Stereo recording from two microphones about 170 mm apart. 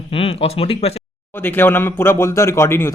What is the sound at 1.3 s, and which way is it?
Speech, 10° left (ahead or behind).